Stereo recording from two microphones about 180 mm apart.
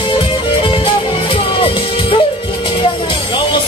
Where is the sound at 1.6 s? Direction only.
30° left (ahead or behind).